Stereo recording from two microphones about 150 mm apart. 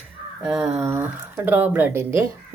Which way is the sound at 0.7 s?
20° right (ahead or behind).